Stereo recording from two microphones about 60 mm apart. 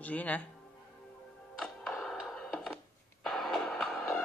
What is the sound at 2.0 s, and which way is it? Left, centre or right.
Music, centre.